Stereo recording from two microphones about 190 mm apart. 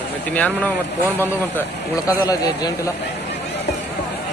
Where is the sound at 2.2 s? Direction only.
20° left (ahead or behind).